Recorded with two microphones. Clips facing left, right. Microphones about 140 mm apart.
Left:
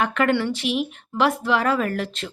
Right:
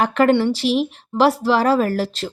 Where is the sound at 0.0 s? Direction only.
35° right (ahead or behind).